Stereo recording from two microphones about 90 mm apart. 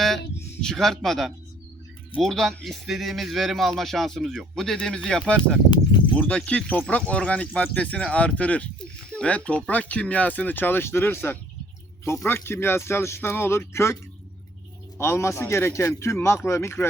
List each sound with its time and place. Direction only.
0.6 s speech: 5° left (ahead or behind); by 13.9 s 30° left (ahead or behind)
14.9 s a man's voice: 30° left (ahead or behind)